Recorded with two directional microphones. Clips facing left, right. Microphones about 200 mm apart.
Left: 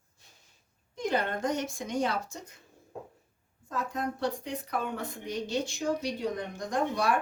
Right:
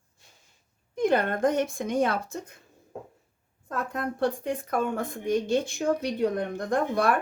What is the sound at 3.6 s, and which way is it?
Speech, 55° right (ahead or behind).